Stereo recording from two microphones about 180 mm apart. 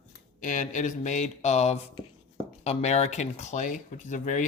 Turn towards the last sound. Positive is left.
turn(degrees=45)  # may be behind; listen again after turning